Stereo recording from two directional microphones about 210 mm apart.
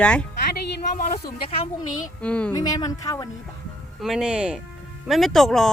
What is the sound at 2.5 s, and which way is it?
Speech, 15° left (ahead or behind).